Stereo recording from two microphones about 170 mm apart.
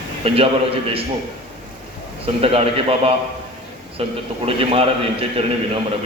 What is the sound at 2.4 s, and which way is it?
A man's voice, 35° right (ahead or behind).